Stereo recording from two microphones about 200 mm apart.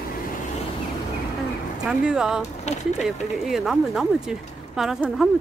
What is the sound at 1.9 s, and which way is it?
Speech, 5° right (ahead or behind).